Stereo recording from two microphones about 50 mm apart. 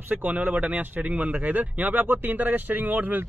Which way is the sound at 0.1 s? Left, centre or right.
Right.